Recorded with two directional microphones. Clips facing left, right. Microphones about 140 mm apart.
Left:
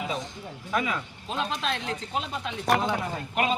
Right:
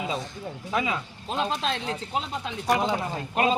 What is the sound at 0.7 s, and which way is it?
Speech, 20° right (ahead or behind).